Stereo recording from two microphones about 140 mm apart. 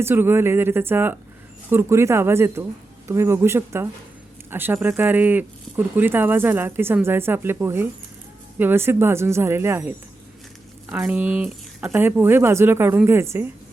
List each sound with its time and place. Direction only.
0.0 s speech: 15° right (ahead or behind)